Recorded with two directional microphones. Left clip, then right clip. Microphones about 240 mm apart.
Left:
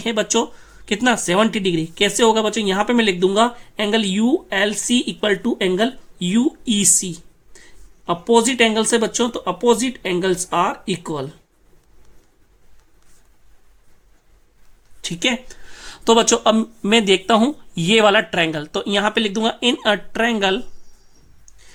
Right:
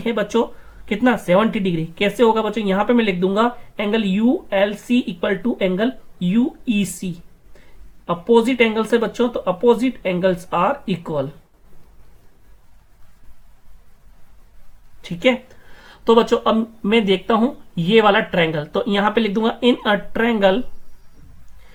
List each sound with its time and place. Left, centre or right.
0.0 s speech: left
15.0 s speech: left